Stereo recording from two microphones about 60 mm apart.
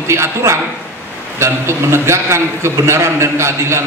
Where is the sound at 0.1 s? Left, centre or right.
Right.